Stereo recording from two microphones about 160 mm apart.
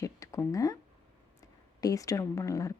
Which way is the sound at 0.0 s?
20° left (ahead or behind).